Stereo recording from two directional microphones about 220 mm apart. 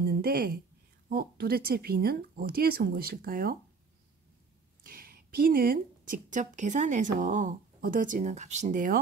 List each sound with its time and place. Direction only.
0.0 s a sound: 45° right (ahead or behind)
1.0 s speech: 45° right (ahead or behind)
4.8 s a woman's voice: 40° right (ahead or behind)